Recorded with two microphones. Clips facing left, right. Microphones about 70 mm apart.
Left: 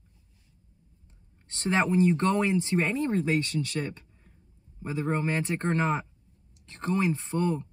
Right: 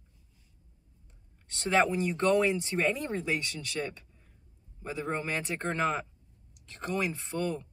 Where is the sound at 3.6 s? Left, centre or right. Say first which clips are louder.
Left 10 dB; centre.